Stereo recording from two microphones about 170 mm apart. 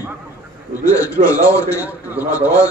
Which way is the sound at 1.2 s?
45° right (ahead or behind).